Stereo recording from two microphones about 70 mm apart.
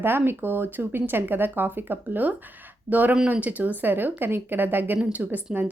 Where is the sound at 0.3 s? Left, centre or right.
Right.